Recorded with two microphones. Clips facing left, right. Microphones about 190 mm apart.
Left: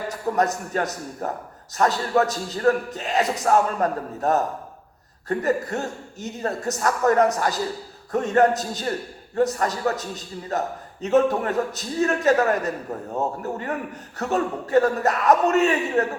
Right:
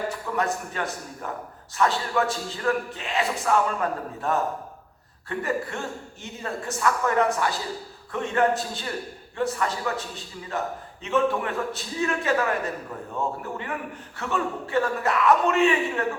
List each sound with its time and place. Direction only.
0.1 s a man's voice: 40° left (ahead or behind)